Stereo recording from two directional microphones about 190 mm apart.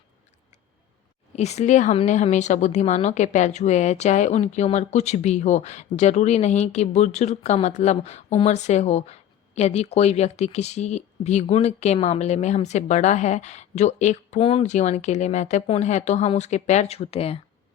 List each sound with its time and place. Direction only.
1.4 s speech: 35° left (ahead or behind)